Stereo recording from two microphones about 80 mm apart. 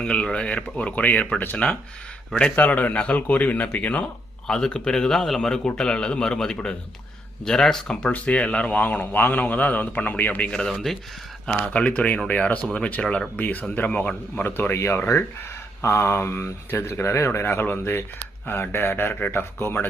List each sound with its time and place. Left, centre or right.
0.0 s a man's voice: centre
4.4 s a man's voice: centre
10.5 s speech: centre
11.6 s a man's voice: centre